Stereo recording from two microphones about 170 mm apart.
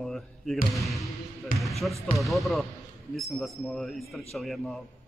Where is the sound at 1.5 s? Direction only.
55° left (ahead or behind).